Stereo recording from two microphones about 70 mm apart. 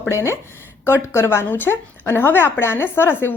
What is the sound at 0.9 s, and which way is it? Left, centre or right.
Speech, left.